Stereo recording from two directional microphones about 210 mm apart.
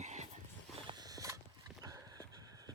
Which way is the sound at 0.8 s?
20° right (ahead or behind).